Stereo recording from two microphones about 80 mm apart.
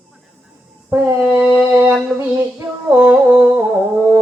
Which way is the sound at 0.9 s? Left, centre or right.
Right.